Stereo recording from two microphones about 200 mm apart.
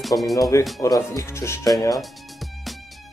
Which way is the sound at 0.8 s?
15° left (ahead or behind).